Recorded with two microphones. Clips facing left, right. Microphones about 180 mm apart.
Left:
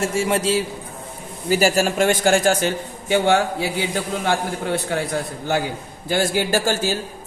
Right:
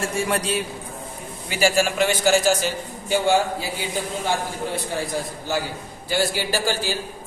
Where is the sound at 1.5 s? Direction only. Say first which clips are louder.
Left 3 dB; 40° left (ahead or behind); by 3.7 s 65° left (ahead or behind).